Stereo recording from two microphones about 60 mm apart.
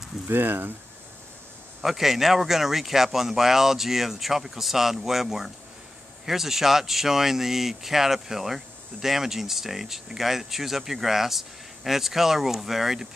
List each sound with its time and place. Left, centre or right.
0.3 s speech: right
1.8 s speech: centre